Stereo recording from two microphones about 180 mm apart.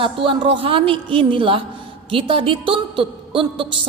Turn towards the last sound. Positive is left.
turn(degrees=-30)  # may be behind; listen again after turning